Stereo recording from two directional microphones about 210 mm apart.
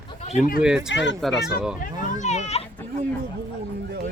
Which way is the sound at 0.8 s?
60° left (ahead or behind).